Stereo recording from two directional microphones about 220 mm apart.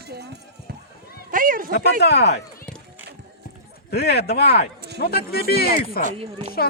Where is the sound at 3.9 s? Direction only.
50° left (ahead or behind).